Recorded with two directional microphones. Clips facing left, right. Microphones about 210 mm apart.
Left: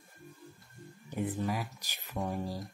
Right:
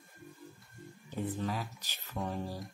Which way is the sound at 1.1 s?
10° left (ahead or behind).